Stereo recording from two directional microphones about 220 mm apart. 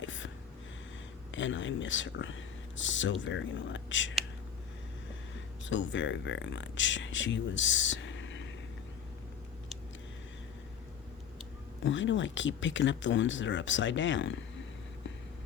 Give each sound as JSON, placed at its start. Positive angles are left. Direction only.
{"t": 0.0, "sound": "a sound", "side_deg": 60}
{"t": 1.3, "sound": "speech", "side_deg": 60}
{"t": 5.6, "sound": "speech", "side_deg": 55}
{"t": 11.8, "sound": "speech", "side_deg": 55}